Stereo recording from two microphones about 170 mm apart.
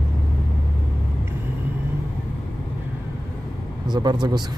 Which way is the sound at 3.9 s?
25° right (ahead or behind).